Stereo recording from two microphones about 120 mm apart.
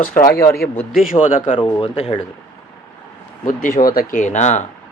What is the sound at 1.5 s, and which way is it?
Speech, 45° left (ahead or behind).